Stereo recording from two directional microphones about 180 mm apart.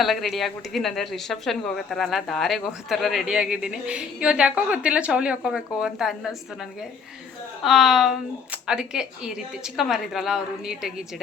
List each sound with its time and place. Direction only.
0.0 s speech: centre (ahead or behind)
7.6 s speech: centre (ahead or behind)